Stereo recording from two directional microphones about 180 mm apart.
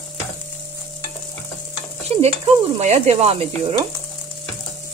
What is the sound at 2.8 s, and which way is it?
Sizzle, 40° right (ahead or behind).